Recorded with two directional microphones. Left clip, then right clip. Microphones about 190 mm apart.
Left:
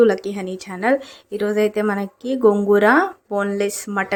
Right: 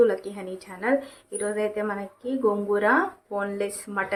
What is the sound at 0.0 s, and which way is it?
Speech, 40° left (ahead or behind).